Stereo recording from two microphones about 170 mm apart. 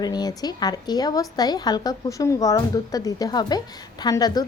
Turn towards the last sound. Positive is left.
turn(degrees=25)  # may be behind; listen again after turning